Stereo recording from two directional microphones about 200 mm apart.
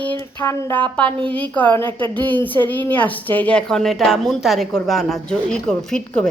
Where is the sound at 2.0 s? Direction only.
10° left (ahead or behind).